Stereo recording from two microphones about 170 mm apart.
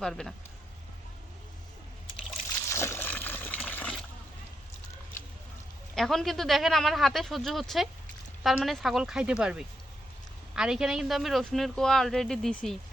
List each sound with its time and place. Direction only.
0.0 s speech: 5° left (ahead or behind)
2.6 s water: 15° left (ahead or behind)
5.9 s speech: centre (ahead or behind)